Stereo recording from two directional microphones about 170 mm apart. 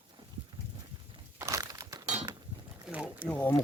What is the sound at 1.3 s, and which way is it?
Crushing, 15° right (ahead or behind).